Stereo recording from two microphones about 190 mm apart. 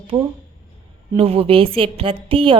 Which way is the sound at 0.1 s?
25° right (ahead or behind).